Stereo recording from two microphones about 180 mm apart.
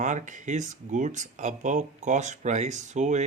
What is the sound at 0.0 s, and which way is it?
Speech, 45° right (ahead or behind).